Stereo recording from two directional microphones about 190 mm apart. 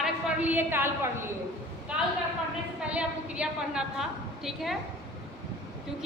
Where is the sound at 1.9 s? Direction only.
5° right (ahead or behind).